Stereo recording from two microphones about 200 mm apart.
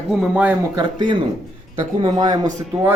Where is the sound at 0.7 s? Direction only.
25° right (ahead or behind).